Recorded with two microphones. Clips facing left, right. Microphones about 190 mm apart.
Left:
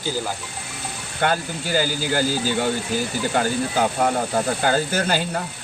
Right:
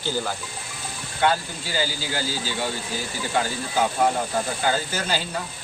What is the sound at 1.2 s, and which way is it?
Speech, 50° left (ahead or behind).